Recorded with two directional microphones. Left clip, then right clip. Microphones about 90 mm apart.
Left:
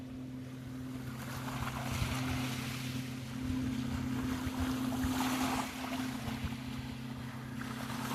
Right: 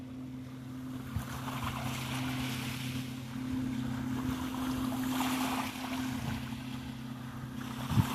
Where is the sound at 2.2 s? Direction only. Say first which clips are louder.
Right 1 dB; 90° right.